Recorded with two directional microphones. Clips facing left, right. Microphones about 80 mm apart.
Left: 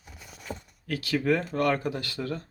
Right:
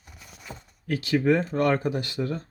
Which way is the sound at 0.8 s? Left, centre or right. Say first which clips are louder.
Right 4 dB; right.